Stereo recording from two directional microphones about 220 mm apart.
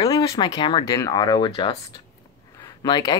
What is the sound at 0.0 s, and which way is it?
Speech, 15° left (ahead or behind).